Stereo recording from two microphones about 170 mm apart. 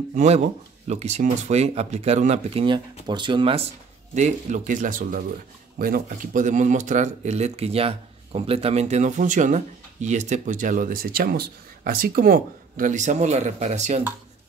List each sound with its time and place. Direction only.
0.1 s speech: 45° right (ahead or behind)
4.1 s speech: 45° right (ahead or behind)